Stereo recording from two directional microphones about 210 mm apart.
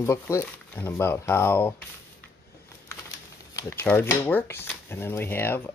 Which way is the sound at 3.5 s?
15° left (ahead or behind).